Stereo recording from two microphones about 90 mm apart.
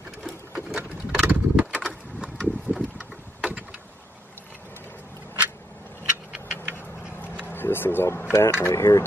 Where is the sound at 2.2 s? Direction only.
5° right (ahead or behind).